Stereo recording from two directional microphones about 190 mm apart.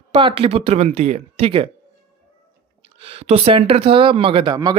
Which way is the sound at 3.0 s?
30° right (ahead or behind).